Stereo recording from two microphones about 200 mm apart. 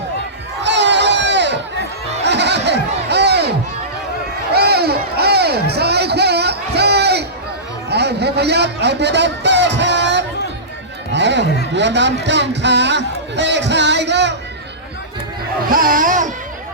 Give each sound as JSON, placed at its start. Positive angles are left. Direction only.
{"t": 0.6, "sound": "crowd", "side_deg": -60}
{"t": 2.2, "sound": "a sound", "side_deg": -60}
{"t": 3.1, "sound": "crowd", "side_deg": -55}
{"t": 4.5, "sound": "crowd", "side_deg": -55}
{"t": 7.9, "sound": "a sound", "side_deg": -55}
{"t": 11.1, "sound": "music", "side_deg": -60}
{"t": 11.7, "sound": "speech", "side_deg": -60}
{"t": 15.7, "sound": "dog", "side_deg": -45}